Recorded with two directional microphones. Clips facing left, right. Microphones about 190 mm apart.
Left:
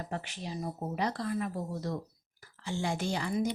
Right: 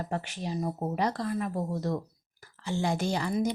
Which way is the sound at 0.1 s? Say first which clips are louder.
Right 5 dB; 50° right (ahead or behind).